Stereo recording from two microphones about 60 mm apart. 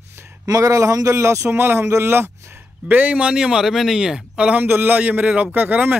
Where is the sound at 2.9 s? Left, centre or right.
Right.